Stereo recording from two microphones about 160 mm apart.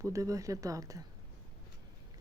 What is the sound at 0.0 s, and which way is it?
Speech, 20° right (ahead or behind).